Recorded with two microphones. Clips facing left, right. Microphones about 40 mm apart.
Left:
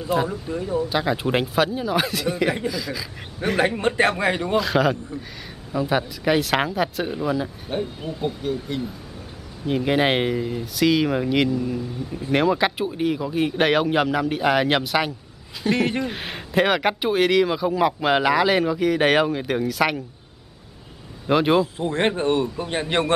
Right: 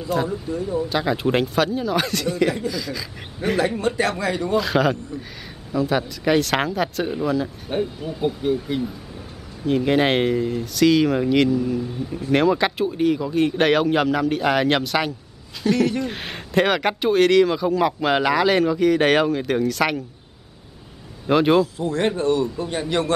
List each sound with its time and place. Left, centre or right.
0.0 s speech: centre
0.7 s speech: centre
3.5 s a man's voice: left
4.6 s speech: centre
5.7 s speech: centre
8.4 s speech: centre
9.7 s speech: centre
15.7 s speech: left
16.0 s speech: centre
21.3 s speech: centre
21.7 s a man's voice: left